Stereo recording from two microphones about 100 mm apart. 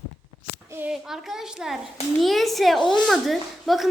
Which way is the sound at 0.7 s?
20° right (ahead or behind).